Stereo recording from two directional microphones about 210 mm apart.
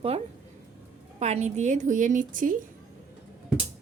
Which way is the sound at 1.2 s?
30° right (ahead or behind).